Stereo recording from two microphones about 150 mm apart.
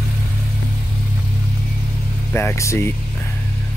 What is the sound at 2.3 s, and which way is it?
Speech, 15° left (ahead or behind).